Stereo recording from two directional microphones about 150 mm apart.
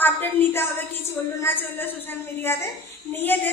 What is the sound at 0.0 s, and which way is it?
A woman's voice, 15° left (ahead or behind).